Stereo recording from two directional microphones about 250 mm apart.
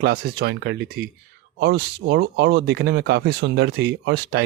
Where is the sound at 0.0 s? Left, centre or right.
Right.